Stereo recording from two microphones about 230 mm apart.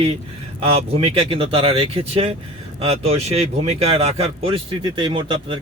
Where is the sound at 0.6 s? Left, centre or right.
Right.